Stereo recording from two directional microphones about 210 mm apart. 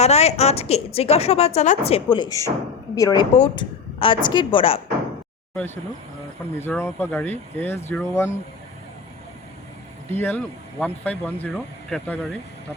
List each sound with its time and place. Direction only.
0.0 s a woman's voice: 30° left (ahead or behind)
5.5 s speech: 10° left (ahead or behind)
10.1 s speech: 10° left (ahead or behind)